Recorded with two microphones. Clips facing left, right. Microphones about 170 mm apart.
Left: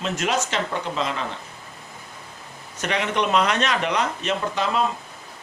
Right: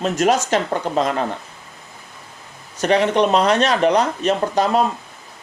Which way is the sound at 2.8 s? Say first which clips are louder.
Right 8 dB; 35° right (ahead or behind).